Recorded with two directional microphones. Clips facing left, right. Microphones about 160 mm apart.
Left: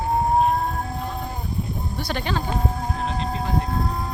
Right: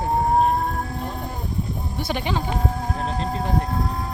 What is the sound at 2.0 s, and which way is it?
Speech, 20° right (ahead or behind).